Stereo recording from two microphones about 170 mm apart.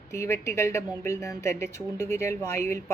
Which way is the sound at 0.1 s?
15° left (ahead or behind).